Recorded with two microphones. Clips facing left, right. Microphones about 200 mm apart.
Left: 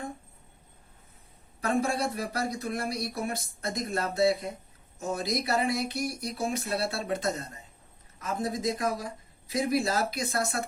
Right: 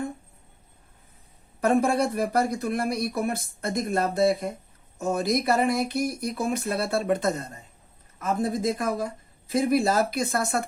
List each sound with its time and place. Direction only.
1.6 s speech: 55° right (ahead or behind)